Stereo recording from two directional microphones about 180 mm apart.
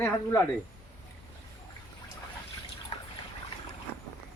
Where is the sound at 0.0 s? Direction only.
15° left (ahead or behind).